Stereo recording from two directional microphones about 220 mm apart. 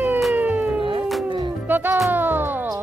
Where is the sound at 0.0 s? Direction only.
5° right (ahead or behind).